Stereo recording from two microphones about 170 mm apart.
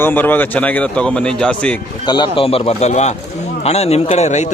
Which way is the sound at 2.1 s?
25° left (ahead or behind).